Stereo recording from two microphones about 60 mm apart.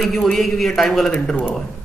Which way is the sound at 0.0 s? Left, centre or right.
Centre.